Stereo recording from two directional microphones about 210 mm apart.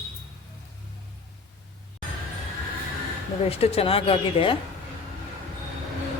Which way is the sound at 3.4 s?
30° left (ahead or behind).